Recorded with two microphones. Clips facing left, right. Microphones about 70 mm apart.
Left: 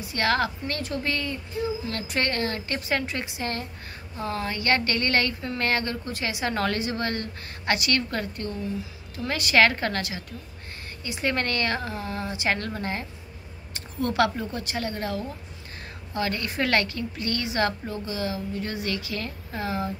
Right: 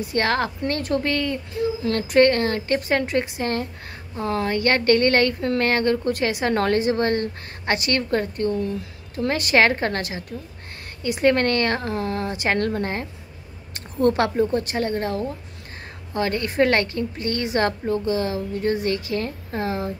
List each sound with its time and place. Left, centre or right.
0.0 s a woman's voice: right
11.0 s a woman's voice: right